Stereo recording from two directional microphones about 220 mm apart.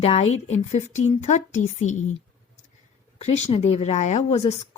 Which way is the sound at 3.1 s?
30° left (ahead or behind).